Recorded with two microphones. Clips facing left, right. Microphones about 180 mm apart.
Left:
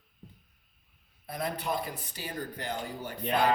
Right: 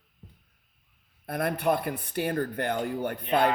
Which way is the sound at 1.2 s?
60° right (ahead or behind).